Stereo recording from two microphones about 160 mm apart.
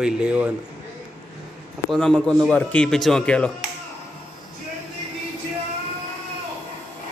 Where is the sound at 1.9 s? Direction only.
5° left (ahead or behind).